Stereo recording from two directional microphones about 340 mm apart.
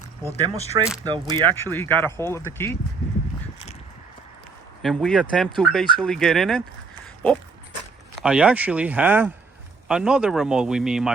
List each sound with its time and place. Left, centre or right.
0.9 s speech: centre
1.3 s speech: centre
4.8 s speech: centre
8.2 s speech: centre